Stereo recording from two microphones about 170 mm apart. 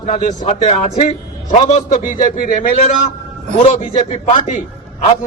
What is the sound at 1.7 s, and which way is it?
Music, 45° left (ahead or behind).